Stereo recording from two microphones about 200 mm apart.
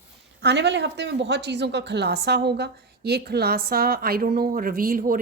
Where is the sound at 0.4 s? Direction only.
60° right (ahead or behind).